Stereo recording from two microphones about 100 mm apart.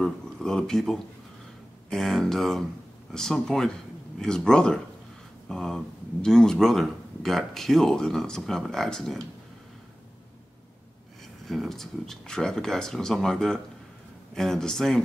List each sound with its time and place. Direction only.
0.0 s speech: 5° left (ahead or behind)
11.4 s speech: centre (ahead or behind)